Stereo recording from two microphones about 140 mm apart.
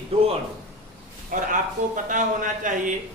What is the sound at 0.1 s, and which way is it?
Speech, 45° right (ahead or behind).